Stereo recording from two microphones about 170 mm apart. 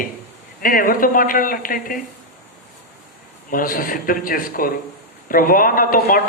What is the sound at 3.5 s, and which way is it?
Speech, 55° left (ahead or behind).